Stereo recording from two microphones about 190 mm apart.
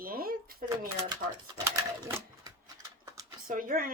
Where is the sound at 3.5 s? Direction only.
45° right (ahead or behind).